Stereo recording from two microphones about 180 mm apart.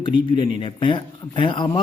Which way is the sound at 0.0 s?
25° left (ahead or behind).